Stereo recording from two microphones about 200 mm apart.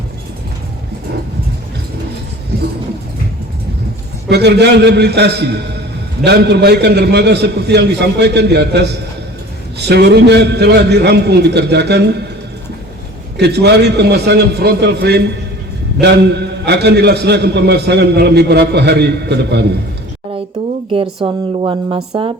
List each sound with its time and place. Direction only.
4.3 s a man's voice: 55° right (ahead or behind)
13.3 s a man's voice: 55° right (ahead or behind)
20.9 s a woman's voice: 25° right (ahead or behind)